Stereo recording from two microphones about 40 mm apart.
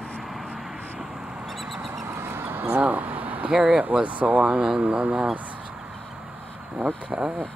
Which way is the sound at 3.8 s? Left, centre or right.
Right.